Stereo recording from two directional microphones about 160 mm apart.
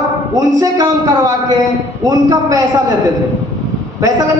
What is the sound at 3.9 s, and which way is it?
Speech, 20° right (ahead or behind).